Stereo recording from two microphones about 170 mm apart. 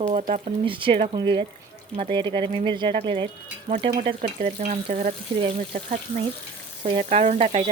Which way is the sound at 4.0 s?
40° right (ahead or behind).